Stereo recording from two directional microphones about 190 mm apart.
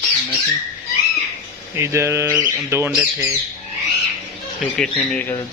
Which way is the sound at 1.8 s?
15° right (ahead or behind).